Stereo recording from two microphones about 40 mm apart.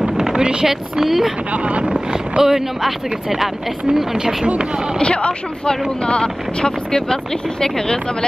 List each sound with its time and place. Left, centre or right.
0.2 s a sound: centre
0.7 s speech: centre
1.5 s speech: right
1.9 s speech: centre
4.9 s speech: left